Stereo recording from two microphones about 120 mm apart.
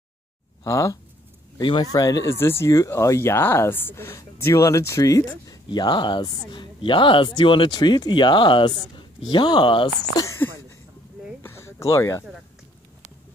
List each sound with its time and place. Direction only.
0.7 s speech: 25° left (ahead or behind)
1.6 s speech: 35° left (ahead or behind)
11.4 s a sound: 25° left (ahead or behind)